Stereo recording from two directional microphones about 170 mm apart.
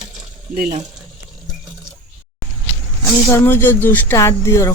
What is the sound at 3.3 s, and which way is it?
Speech, 15° left (ahead or behind).